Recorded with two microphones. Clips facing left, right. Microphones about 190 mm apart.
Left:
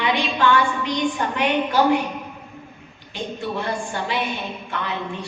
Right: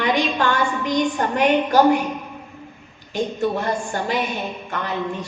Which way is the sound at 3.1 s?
45° right (ahead or behind).